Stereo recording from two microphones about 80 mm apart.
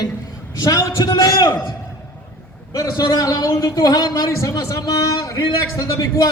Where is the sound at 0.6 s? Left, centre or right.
Left.